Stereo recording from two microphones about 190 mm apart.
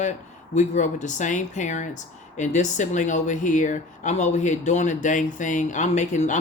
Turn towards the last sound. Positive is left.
turn(degrees=40)  # may be behind; listen again after turning